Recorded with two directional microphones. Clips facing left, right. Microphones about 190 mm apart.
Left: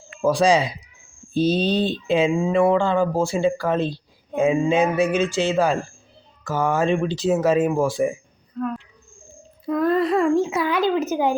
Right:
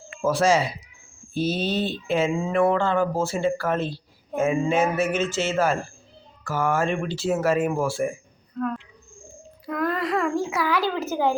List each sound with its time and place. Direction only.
0.2 s speech: 15° left (ahead or behind)
8.6 s a sound: centre (ahead or behind)
9.6 s speech: 25° left (ahead or behind)